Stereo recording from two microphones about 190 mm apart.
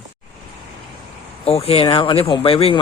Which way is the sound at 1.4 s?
30° left (ahead or behind).